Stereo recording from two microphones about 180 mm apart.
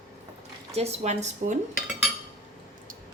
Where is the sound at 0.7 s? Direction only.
35° right (ahead or behind).